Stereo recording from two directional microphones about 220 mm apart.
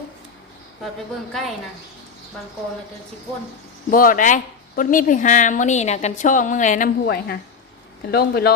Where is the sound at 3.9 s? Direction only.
40° left (ahead or behind).